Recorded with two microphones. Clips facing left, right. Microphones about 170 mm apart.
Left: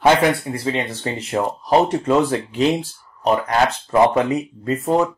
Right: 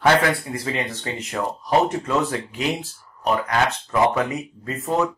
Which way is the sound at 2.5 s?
Centre (ahead or behind).